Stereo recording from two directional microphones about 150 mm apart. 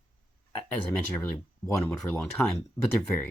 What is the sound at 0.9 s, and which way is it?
Speech, 10° left (ahead or behind).